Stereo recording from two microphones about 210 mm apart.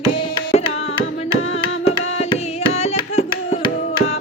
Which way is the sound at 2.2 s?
30° left (ahead or behind).